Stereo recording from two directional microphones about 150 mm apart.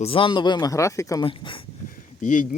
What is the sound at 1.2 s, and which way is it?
Speech, 35° left (ahead or behind).